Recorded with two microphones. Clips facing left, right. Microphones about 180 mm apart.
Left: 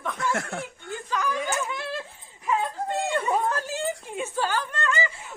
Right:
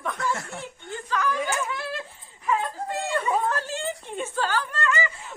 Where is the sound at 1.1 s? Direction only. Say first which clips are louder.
Right 1 dB; 15° left (ahead or behind).